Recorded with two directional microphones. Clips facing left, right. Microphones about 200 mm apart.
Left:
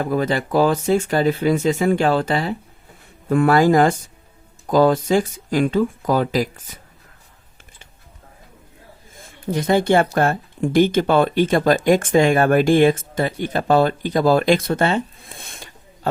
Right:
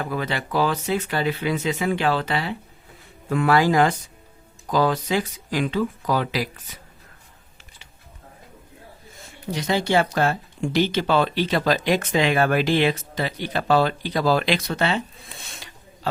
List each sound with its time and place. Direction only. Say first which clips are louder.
0.0 s speech: left 7 dB; 45° left (ahead or behind)
9.0 s speech: left 5 dB; 50° left (ahead or behind)